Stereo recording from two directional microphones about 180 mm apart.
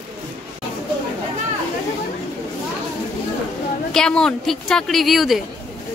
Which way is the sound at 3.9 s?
5° left (ahead or behind).